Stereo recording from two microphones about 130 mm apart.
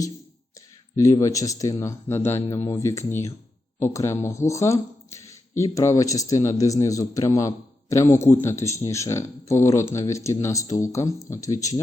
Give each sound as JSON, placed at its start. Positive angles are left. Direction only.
{"t": 1.2, "sound": "a man's voice", "side_deg": 25}